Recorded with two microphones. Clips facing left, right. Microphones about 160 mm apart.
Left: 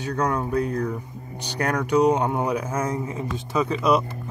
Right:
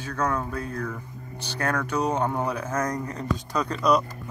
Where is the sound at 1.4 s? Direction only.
15° left (ahead or behind).